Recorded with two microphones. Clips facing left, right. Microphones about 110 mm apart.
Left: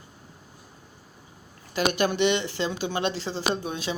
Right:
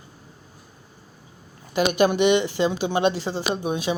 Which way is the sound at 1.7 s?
15° right (ahead or behind).